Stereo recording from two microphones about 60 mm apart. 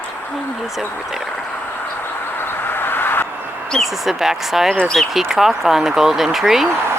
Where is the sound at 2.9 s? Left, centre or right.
Left.